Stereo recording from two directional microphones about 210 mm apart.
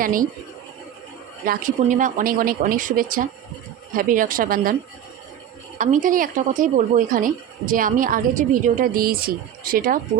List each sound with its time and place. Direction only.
0.0 s speech: 40° right (ahead or behind)
1.5 s speech: 40° right (ahead or behind)